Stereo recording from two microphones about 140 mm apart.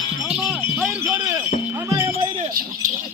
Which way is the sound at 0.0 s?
35° left (ahead or behind).